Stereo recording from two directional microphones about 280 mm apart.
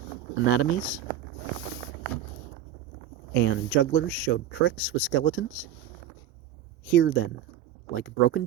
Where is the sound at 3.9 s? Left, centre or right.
Left.